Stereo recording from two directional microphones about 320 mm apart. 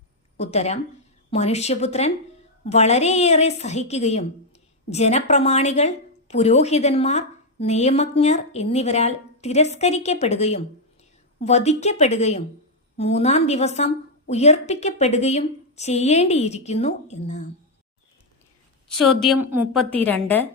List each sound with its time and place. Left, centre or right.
0.3 s a woman's voice: centre
18.9 s speech: centre
20.1 s speech: centre